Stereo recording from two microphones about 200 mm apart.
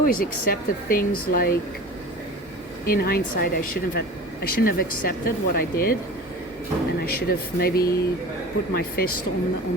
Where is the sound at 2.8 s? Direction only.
50° left (ahead or behind).